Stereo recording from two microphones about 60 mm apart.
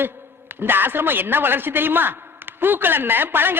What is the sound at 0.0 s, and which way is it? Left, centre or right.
A man's voice, right.